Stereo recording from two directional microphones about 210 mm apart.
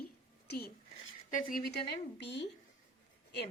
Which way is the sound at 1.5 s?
50° left (ahead or behind).